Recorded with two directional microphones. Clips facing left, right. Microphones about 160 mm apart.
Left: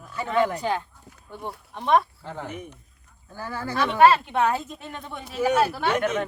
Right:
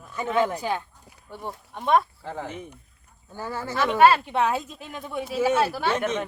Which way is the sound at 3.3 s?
25° right (ahead or behind).